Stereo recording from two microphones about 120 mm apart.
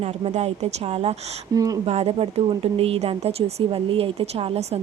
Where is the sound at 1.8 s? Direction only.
60° right (ahead or behind).